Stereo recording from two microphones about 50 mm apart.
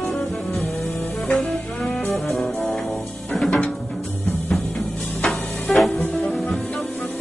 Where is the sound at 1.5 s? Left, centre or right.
Centre.